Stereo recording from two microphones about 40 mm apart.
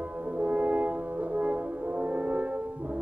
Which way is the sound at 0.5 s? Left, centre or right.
Right.